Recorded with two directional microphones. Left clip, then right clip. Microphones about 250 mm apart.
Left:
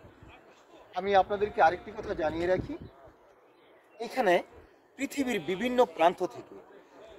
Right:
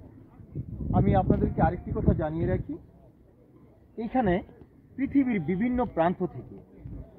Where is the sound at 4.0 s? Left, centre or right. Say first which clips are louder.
Left 1 dB; centre.